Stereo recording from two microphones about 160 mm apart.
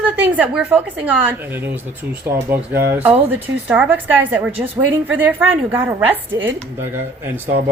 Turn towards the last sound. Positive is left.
turn(degrees=-15)  # may be behind; listen again after turning